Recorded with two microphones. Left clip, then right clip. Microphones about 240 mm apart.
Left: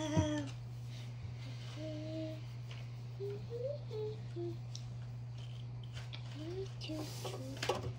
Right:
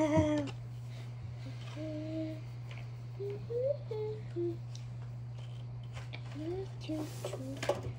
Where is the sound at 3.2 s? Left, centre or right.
Centre.